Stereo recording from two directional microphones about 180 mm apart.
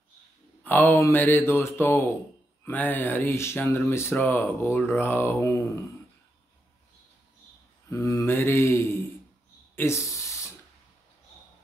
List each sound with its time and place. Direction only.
0.7 s speech: 10° left (ahead or behind)
7.9 s speech: 15° left (ahead or behind)
9.8 s a sound: 15° left (ahead or behind)